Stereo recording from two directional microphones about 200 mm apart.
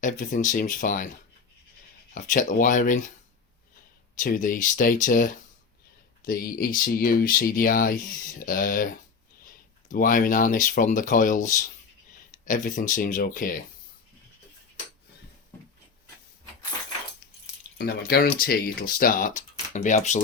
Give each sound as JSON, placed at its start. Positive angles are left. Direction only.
{"t": 0.0, "sound": "speech", "side_deg": 40}
{"t": 2.1, "sound": "speech", "side_deg": 40}
{"t": 4.2, "sound": "speech", "side_deg": 40}
{"t": 17.7, "sound": "speech", "side_deg": 50}